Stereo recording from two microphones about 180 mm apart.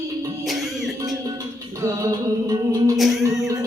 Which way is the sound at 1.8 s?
20° right (ahead or behind).